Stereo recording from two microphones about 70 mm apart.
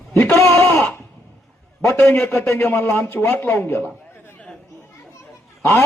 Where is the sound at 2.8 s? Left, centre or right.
Left.